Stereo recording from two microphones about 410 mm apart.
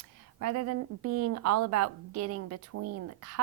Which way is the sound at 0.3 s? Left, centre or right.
Right.